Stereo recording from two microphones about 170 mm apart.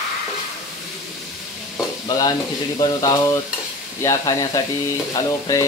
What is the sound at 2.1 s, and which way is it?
Frying, 25° left (ahead or behind).